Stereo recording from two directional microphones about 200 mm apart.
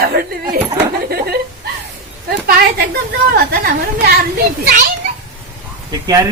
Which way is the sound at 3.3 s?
50° right (ahead or behind).